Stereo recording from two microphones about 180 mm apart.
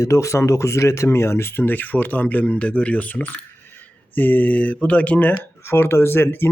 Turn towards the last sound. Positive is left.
turn(degrees=10)  # may be behind; listen again after turning